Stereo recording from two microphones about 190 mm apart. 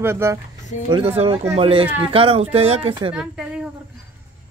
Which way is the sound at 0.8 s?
30° right (ahead or behind).